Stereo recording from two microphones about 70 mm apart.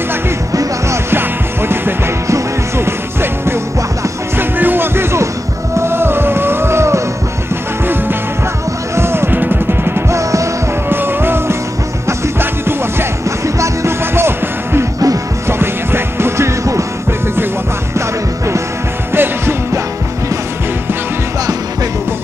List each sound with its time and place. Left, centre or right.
0.5 s music: right
1.1 s music: right
8.9 s music: right
10.9 s music: right
19.1 s music: right